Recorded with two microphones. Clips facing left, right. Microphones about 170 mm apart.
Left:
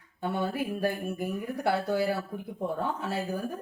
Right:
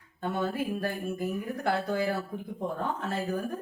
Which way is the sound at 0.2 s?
10° left (ahead or behind).